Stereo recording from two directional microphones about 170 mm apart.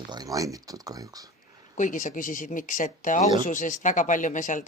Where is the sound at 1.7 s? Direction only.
50° left (ahead or behind).